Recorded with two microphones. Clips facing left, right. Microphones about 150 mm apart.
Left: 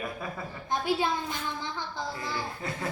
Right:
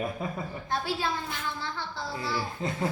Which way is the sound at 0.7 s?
20° left (ahead or behind).